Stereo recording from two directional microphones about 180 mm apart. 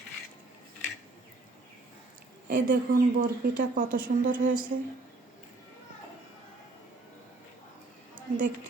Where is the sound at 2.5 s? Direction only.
50° right (ahead or behind).